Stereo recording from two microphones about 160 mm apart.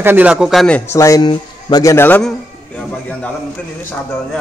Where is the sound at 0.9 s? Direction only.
20° left (ahead or behind).